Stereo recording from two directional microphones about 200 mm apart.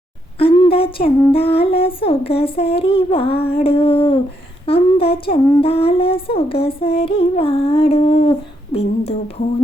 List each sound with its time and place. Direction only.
0.3 s speech: 25° left (ahead or behind)
1.3 s humming: 30° left (ahead or behind)